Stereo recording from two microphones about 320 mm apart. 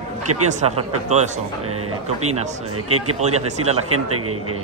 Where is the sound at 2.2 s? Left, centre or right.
Right.